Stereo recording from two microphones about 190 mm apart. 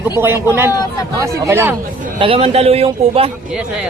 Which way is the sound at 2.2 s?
30° right (ahead or behind).